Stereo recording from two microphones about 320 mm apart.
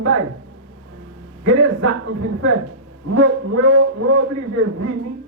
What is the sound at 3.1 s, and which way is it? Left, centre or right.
A man's voice, right.